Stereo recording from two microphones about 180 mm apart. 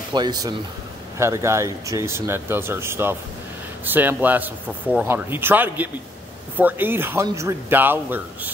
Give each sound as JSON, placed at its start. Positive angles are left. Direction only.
{"t": 0.1, "sound": "speech", "side_deg": -25}